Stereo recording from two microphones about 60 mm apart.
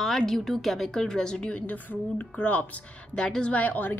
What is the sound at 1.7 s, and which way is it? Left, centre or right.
Speech, left.